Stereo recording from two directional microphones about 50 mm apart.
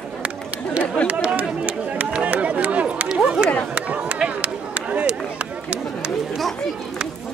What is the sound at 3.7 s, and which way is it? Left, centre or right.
Run, right.